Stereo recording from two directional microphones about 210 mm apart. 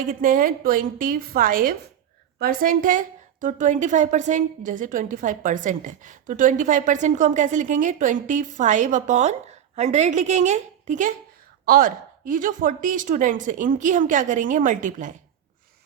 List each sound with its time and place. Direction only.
0.1 s a woman's voice: 40° right (ahead or behind)